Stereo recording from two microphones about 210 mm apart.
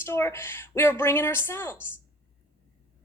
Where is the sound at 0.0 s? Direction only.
10° left (ahead or behind).